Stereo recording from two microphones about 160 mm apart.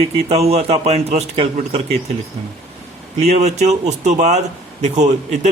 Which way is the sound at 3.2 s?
45° right (ahead or behind).